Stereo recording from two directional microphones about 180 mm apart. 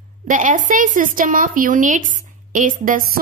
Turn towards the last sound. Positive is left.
turn(degrees=-50)  # may be behind; listen again after turning